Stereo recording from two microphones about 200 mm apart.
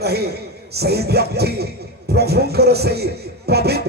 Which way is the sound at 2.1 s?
55° right (ahead or behind).